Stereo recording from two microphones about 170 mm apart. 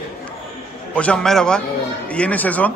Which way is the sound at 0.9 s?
5° left (ahead or behind).